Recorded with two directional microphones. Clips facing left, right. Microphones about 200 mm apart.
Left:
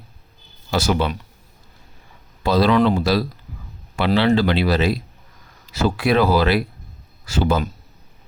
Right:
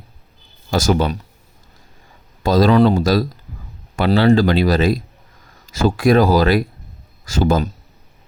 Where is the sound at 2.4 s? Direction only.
45° right (ahead or behind).